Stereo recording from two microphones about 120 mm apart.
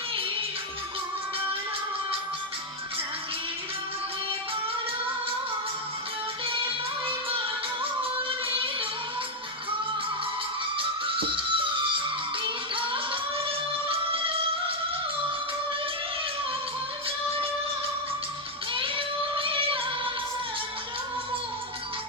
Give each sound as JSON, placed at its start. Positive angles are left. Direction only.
{"t": 7.1, "sound": "music", "side_deg": -45}
{"t": 10.8, "sound": "music", "side_deg": -45}
{"t": 18.7, "sound": "child singing", "side_deg": -45}